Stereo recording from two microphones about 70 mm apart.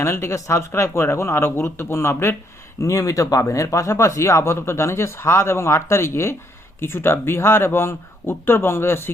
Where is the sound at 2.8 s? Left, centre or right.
Left.